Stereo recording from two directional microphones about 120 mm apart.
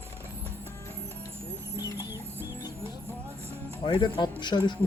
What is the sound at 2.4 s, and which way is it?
Music, 20° right (ahead or behind).